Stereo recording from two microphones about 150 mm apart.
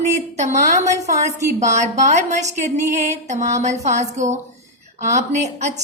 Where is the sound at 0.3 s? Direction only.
50° right (ahead or behind).